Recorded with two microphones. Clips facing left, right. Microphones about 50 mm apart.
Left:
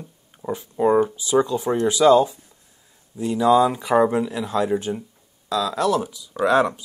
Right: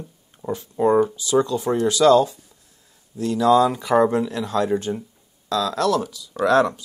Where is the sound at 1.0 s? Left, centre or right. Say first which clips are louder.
Even; left.